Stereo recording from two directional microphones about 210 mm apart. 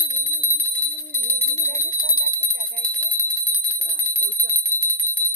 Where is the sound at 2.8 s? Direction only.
10° left (ahead or behind).